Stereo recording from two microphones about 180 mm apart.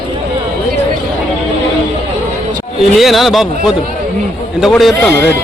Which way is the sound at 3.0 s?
Centre (ahead or behind).